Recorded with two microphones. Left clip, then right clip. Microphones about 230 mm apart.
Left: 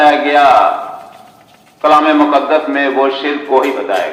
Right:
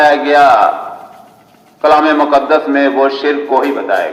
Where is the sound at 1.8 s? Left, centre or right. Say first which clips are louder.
Even; right.